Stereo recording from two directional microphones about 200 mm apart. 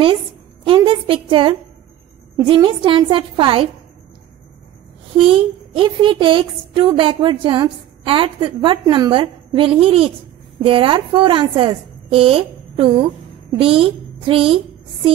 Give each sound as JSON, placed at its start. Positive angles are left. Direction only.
{"t": 0.7, "sound": "a woman's voice", "side_deg": -25}
{"t": 5.1, "sound": "a woman's voice", "side_deg": -25}